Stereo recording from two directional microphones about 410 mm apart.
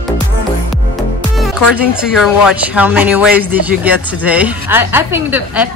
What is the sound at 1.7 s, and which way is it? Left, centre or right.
Speech, centre.